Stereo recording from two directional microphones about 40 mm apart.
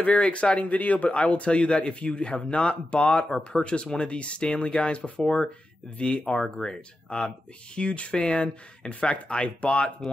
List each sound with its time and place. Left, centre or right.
0.0 s speech: left
0.7 s speech: left
5.2 s speech: centre
5.9 s speech: left